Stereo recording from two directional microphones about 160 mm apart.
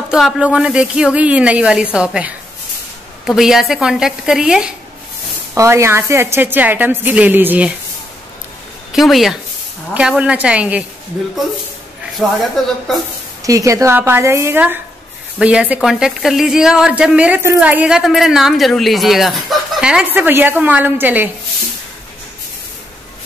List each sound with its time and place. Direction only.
0.1 s a woman's voice: 5° right (ahead or behind)
5.5 s a woman's voice: 15° right (ahead or behind)
8.9 s a woman's voice: centre (ahead or behind)
12.2 s a woman's voice: centre (ahead or behind)
13.4 s a woman's voice: 20° right (ahead or behind)